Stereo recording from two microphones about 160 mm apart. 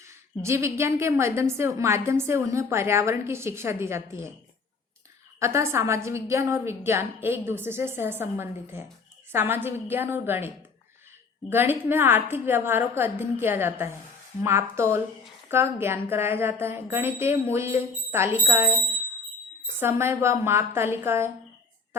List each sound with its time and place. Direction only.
0.0 s a woman's voice: 15° right (ahead or behind)
5.4 s a woman's voice: 15° right (ahead or behind)
19.8 s a woman's voice: 15° right (ahead or behind)